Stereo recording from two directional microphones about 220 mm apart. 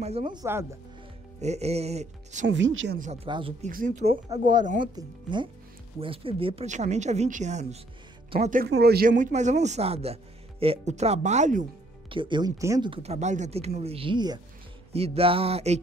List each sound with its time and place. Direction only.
0.0 s speech: 30° right (ahead or behind)
1.4 s speech: 30° right (ahead or behind)
2.4 s speech: 55° right (ahead or behind)
3.3 s speech: 25° right (ahead or behind)
3.7 s speech: 35° right (ahead or behind)
4.3 s speech: 20° right (ahead or behind); by 8.6 s 35° right (ahead or behind)
8.6 s speech: 45° right (ahead or behind)
12.1 s speech: 20° right (ahead or behind)